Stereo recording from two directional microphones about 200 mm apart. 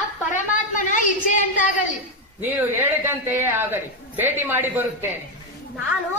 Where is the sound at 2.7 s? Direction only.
10° right (ahead or behind).